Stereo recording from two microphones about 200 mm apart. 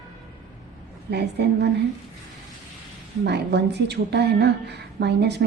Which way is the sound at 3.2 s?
55° right (ahead or behind).